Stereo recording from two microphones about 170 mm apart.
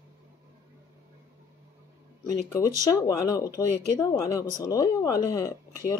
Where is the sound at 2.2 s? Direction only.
20° left (ahead or behind).